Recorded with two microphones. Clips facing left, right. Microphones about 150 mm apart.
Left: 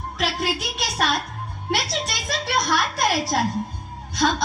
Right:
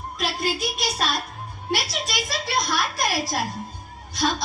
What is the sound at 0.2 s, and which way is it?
A woman's voice, 75° left (ahead or behind).